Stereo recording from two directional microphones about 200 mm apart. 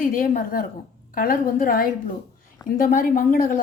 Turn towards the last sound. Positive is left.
turn(degrees=45)  # may be behind; listen again after turning